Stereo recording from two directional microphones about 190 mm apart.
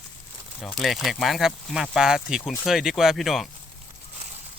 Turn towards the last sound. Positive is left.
turn(degrees=0)  # may be behind; listen again after turning